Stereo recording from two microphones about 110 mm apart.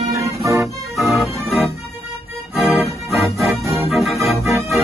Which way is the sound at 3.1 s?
Centre (ahead or behind).